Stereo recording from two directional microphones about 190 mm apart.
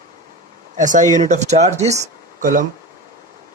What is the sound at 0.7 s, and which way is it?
Speech, 40° right (ahead or behind).